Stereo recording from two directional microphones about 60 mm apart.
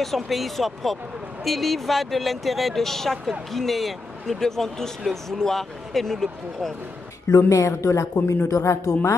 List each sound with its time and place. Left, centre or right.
0.0 s speech: centre
7.4 s speech: left